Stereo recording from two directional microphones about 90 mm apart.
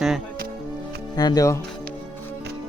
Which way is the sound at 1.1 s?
45° left (ahead or behind).